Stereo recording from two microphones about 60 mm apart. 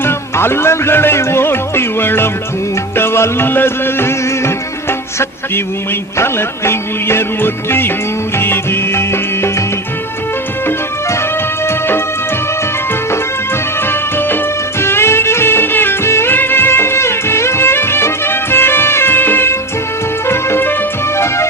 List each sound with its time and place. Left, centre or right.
0.0 s speech: left
2.9 s music: left
6.1 s music: left
11.6 s music: left
13.8 s music: left